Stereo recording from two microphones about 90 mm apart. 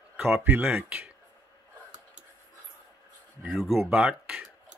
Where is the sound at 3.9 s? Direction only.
10° right (ahead or behind).